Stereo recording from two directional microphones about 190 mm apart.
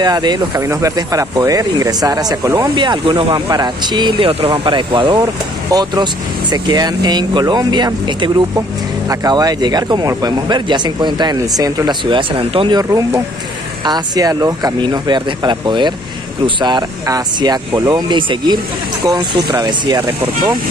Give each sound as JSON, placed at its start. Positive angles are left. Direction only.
{"t": 0.0, "sound": "speech", "side_deg": -20}